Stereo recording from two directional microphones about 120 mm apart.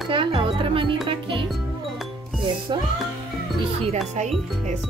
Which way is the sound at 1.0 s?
45° right (ahead or behind).